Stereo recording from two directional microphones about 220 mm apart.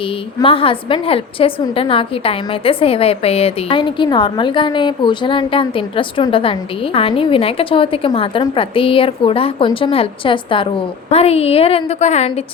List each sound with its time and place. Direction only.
0.3 s a woman's voice: 25° left (ahead or behind)